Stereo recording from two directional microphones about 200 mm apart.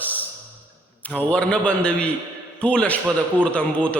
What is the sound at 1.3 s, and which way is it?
A man's voice, 5° left (ahead or behind).